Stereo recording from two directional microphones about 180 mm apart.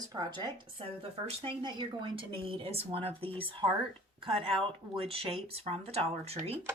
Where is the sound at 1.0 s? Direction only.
30° right (ahead or behind).